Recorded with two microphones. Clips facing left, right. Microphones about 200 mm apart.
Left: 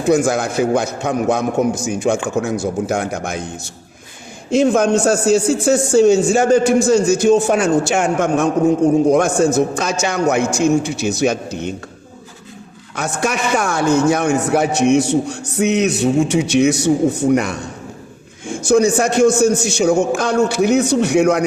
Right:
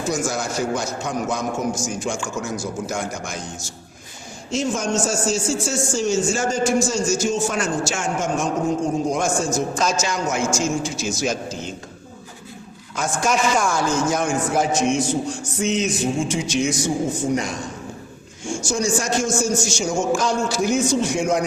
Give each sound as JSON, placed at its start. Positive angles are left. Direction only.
{"t": 0.0, "sound": "a man's voice", "side_deg": 60}
{"t": 13.0, "sound": "a man's voice", "side_deg": 65}